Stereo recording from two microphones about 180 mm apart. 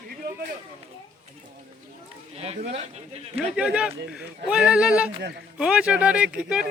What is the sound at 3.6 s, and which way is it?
Speech, 5° right (ahead or behind).